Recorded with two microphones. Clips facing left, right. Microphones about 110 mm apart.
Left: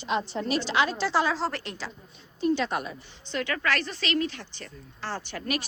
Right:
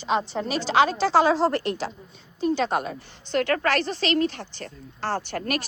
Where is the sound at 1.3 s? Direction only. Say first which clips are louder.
Right 8 dB; 55° right (ahead or behind).